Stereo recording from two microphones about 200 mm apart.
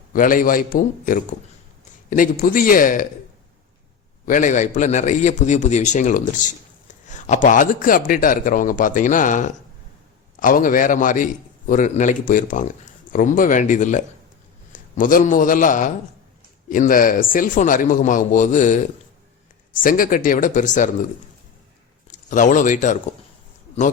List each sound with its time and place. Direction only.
0.1 s a man's voice: 45° left (ahead or behind)
4.3 s a man's voice: 40° left (ahead or behind)
19.8 s a man's voice: 45° left (ahead or behind)
22.0 s speech: 40° left (ahead or behind)